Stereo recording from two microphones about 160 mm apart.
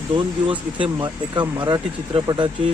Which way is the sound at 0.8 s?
30° right (ahead or behind).